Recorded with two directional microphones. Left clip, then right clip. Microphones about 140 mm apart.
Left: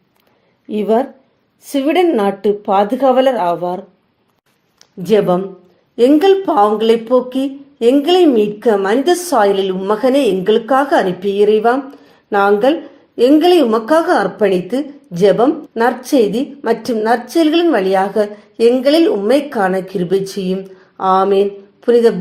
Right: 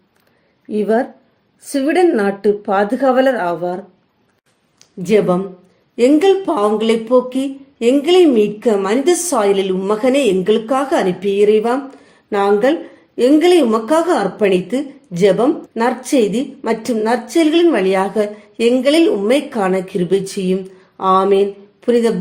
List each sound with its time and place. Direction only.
0.7 s speech: 35° left (ahead or behind)
5.0 s a woman's voice: 20° left (ahead or behind)